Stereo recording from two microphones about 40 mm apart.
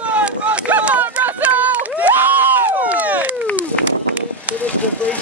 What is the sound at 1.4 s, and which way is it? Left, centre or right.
Run, right.